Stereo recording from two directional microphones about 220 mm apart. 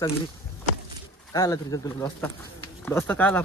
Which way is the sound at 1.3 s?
15° left (ahead or behind).